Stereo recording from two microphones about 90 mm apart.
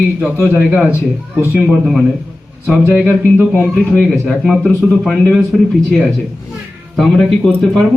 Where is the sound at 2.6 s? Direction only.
10° right (ahead or behind).